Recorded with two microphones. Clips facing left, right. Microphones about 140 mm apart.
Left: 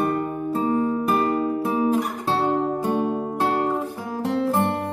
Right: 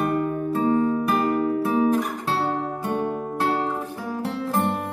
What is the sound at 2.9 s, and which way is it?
Music, 20° left (ahead or behind).